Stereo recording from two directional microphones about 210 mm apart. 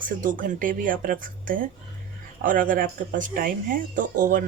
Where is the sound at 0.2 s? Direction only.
40° right (ahead or behind).